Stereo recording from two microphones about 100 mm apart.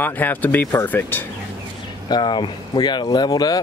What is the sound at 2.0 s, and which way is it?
Speech, 50° left (ahead or behind).